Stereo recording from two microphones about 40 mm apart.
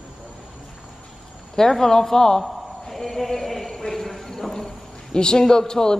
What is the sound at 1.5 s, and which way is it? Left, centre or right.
Speech, centre.